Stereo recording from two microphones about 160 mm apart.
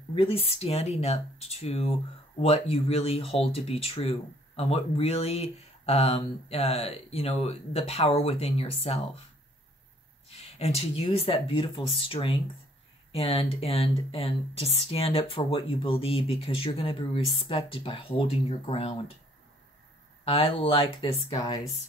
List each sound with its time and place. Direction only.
0.1 s speech: 35° left (ahead or behind)
10.2 s speech: 40° left (ahead or behind)
20.2 s speech: 35° left (ahead or behind)